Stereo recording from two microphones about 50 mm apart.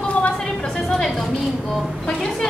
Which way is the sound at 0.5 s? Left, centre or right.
Centre.